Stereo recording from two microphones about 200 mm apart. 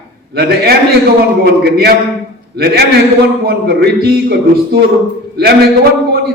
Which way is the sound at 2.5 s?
55° right (ahead or behind).